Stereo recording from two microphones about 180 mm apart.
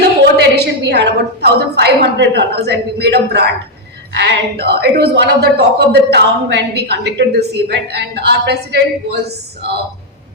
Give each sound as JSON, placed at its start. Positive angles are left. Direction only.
{"t": 0.0, "sound": "a woman's voice", "side_deg": -65}